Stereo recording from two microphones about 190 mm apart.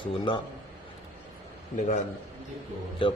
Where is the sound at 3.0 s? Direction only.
25° left (ahead or behind).